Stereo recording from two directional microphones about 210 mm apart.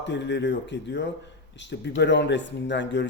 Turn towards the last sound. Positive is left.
turn(degrees=55)  # may be behind; listen again after turning